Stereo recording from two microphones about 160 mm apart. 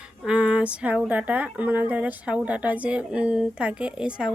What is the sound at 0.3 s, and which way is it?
Speech, 5° right (ahead or behind).